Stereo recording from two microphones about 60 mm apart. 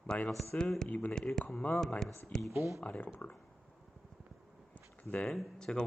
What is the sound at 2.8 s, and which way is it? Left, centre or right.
Speech, left.